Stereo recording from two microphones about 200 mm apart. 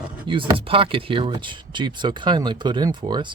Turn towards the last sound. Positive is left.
turn(degrees=-20)  # may be behind; listen again after turning